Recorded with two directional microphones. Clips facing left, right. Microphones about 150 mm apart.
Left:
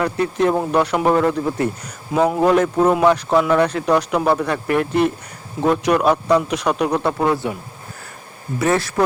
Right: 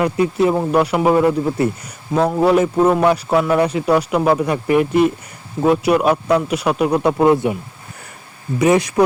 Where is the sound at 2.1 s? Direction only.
5° left (ahead or behind).